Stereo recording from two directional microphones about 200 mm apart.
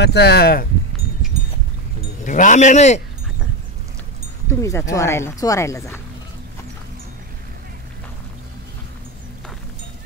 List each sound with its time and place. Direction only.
0.0 s speech: 55° left (ahead or behind)
2.2 s speech: 40° left (ahead or behind)
4.5 s speech: 15° left (ahead or behind)